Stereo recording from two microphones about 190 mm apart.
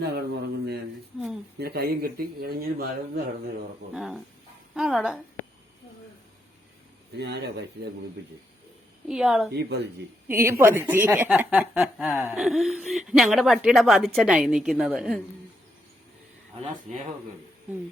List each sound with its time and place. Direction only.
0.0 s speech: 55° right (ahead or behind)
1.1 s a sound: centre (ahead or behind)
1.5 s speech: 55° right (ahead or behind)
3.9 s speech: centre (ahead or behind)
7.2 s speech: 65° right (ahead or behind)
9.0 s speech: 5° right (ahead or behind)
9.5 s speech: 60° right (ahead or behind)
10.2 s speech: 15° right (ahead or behind)
16.9 s speech: 40° right (ahead or behind)